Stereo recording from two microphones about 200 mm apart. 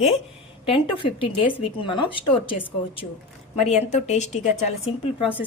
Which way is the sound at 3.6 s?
35° left (ahead or behind).